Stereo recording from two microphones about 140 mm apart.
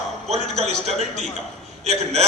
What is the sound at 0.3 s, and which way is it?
A man's voice, 50° right (ahead or behind).